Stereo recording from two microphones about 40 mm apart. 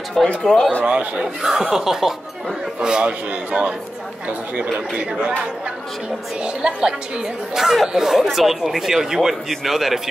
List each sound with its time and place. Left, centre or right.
0.4 s speech: centre
0.8 s a man's voice: right
1.4 s speech: centre
2.8 s a man's voice: right
6.4 s a man's voice: right
7.5 s speech: centre